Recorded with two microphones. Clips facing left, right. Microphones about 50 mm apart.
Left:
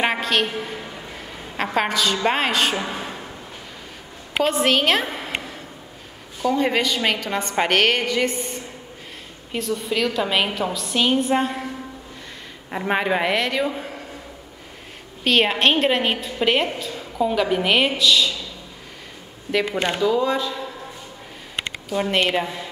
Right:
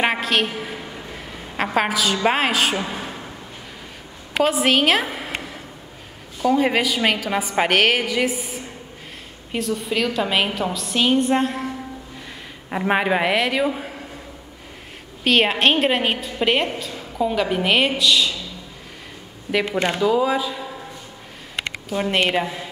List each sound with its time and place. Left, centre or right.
0.0 s a sound: centre
2.2 s a woman's voice: centre
4.4 s a woman's voice: centre
6.4 s a woman's voice: centre
12.7 s a man's voice: centre
15.2 s a woman's voice: centre
20.0 s a man's voice: centre
21.8 s a woman's voice: centre